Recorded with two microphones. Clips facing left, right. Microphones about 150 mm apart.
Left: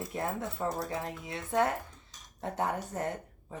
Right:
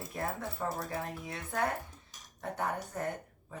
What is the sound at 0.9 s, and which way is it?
Speech, 30° left (ahead or behind).